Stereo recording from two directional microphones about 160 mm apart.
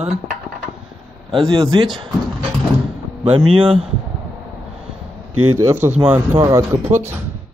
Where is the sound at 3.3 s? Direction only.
35° right (ahead or behind).